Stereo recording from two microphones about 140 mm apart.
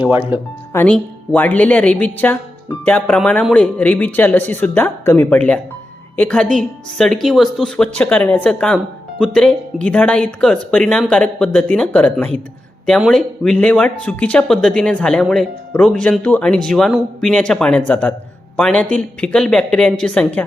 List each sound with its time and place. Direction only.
0.7 s a woman's voice: 15° left (ahead or behind)